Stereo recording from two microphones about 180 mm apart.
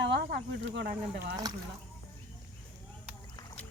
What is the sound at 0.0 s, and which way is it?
Speech, 70° right (ahead or behind).